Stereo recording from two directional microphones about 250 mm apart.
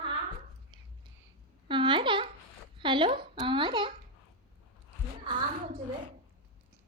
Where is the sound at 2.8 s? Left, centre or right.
Centre.